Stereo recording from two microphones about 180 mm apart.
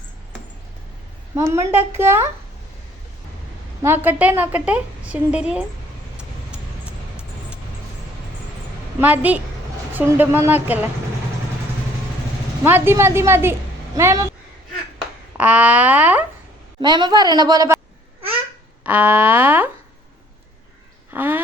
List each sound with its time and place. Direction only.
1.4 s a woman's voice: 15° right (ahead or behind)
3.8 s a woman's voice: 10° right (ahead or behind)
6.1 s vehicle: 5° right (ahead or behind)
9.0 s a woman's voice: 10° right (ahead or behind)
12.6 s a woman's voice: 10° right (ahead or behind)
15.4 s a woman's voice: 10° right (ahead or behind)
16.8 s a woman's voice: 25° right (ahead or behind)
18.9 s a woman's voice: 10° right (ahead or behind)
21.1 s duck: 10° right (ahead or behind)